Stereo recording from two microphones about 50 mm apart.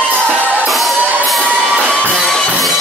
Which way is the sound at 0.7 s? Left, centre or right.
Centre.